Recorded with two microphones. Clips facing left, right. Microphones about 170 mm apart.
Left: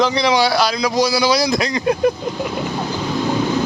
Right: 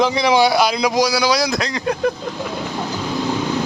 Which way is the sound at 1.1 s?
Centre (ahead or behind).